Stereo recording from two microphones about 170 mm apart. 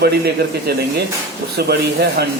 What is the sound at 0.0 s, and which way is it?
A man's voice, 75° right (ahead or behind).